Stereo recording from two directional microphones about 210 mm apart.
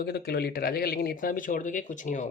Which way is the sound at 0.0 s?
50° left (ahead or behind).